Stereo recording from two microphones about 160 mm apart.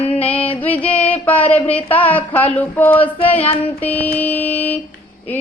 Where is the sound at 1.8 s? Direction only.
35° left (ahead or behind).